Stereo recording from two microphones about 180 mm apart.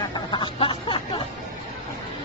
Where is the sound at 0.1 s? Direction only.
25° left (ahead or behind).